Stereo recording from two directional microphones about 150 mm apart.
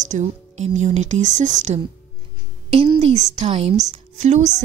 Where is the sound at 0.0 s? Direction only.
50° right (ahead or behind).